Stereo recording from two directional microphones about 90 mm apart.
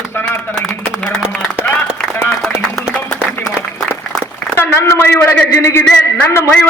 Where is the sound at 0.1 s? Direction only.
25° left (ahead or behind).